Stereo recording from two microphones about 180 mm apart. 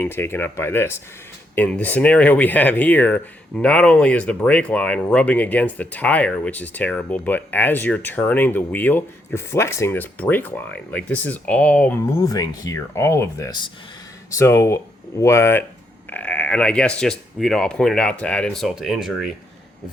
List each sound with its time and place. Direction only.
0.0 s speech: 10° left (ahead or behind)
12.2 s speech: 20° left (ahead or behind); by 19.3 s centre (ahead or behind)